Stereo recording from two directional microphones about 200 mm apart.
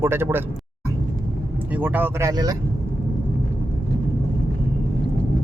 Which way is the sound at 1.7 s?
10° right (ahead or behind).